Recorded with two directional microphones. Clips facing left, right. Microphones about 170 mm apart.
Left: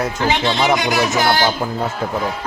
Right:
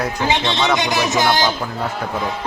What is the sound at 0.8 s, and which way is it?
Speech, 20° right (ahead or behind).